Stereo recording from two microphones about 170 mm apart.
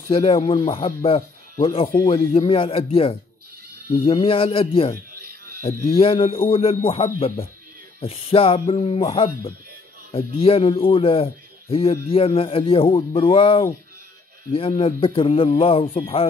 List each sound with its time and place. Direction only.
0.1 s speech: 35° left (ahead or behind)
5.9 s speech: 30° left (ahead or behind)